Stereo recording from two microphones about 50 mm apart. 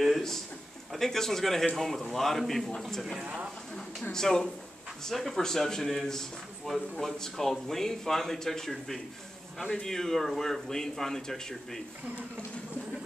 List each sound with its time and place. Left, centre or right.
0.0 s a sound: centre
0.9 s a man's voice: centre
3.2 s speech: right
4.1 s a man's voice: centre